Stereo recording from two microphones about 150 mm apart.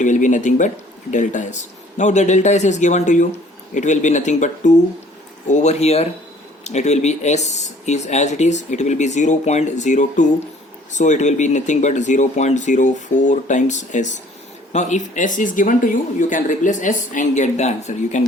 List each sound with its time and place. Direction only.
0.0 s speech: 55° left (ahead or behind)